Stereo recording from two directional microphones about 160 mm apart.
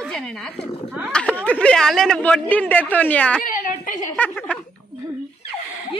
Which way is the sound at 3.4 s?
60° left (ahead or behind).